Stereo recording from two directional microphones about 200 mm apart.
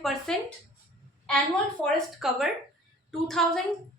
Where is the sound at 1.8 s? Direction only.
Centre (ahead or behind).